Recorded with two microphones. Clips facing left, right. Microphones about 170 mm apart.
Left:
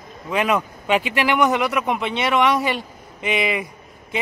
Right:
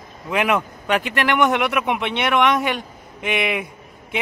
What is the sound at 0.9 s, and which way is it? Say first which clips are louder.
Speech: left 1 dB; 10° left (ahead or behind).